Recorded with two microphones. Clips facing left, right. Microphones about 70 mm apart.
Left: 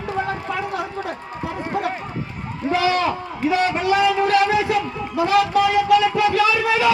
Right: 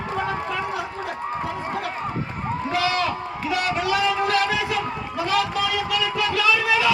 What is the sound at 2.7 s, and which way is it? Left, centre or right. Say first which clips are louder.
A man's voice: left 5 dB; left.